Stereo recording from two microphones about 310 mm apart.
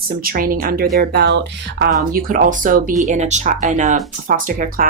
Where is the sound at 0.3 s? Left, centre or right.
Right.